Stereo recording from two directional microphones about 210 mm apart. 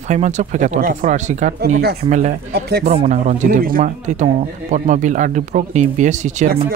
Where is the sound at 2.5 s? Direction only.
50° right (ahead or behind).